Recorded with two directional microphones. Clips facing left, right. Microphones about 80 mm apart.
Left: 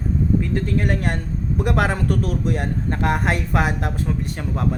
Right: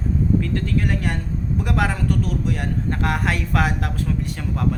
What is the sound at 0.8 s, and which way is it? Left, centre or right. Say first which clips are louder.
Speech: left 1 dB; left.